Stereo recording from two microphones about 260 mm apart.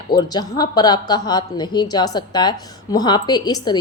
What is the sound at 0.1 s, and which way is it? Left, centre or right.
A woman's voice, centre.